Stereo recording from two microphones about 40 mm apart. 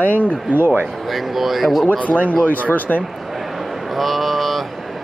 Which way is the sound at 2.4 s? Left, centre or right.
Left.